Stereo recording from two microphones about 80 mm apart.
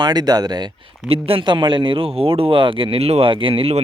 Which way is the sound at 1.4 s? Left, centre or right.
Right.